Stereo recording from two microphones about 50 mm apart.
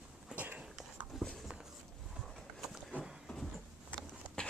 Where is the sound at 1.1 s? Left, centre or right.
Centre.